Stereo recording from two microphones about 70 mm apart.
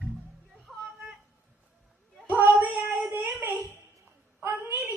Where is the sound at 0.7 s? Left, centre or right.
Centre.